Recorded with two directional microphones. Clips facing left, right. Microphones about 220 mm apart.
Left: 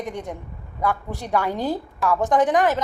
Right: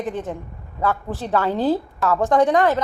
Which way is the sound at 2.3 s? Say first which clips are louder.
Right 2 dB; 15° left (ahead or behind).